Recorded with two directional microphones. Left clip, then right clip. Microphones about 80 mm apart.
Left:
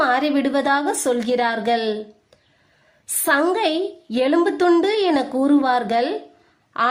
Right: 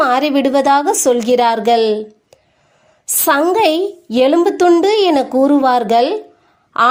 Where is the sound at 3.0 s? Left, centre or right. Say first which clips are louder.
Right 5 dB; right.